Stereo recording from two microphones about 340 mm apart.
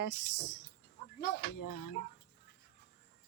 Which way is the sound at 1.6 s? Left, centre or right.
Left.